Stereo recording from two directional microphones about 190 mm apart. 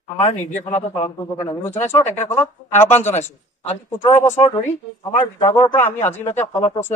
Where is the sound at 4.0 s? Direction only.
20° left (ahead or behind).